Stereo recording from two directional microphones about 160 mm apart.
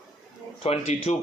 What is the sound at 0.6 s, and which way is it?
Speech, 40° left (ahead or behind).